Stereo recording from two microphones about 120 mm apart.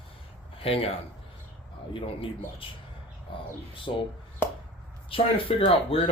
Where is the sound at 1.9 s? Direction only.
50° left (ahead or behind).